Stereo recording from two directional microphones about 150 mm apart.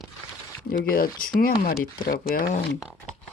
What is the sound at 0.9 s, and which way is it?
Speech, 75° left (ahead or behind).